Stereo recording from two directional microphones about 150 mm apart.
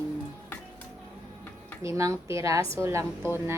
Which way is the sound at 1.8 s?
20° right (ahead or behind).